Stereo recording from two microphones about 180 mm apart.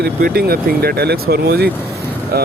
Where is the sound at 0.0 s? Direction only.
55° right (ahead or behind).